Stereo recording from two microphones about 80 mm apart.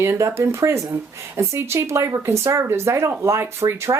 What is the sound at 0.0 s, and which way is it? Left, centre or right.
Speech, right.